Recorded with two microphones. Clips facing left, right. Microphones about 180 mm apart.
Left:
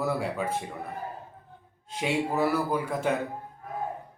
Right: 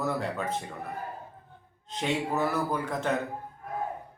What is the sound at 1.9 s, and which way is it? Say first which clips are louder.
Speech: left 1 dB; 10° left (ahead or behind).